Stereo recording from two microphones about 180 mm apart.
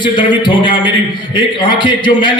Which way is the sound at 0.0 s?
25° left (ahead or behind).